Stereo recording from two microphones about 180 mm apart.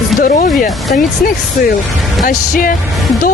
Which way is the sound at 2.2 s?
50° left (ahead or behind).